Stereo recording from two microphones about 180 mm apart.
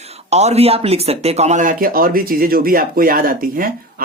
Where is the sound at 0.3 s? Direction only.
35° right (ahead or behind).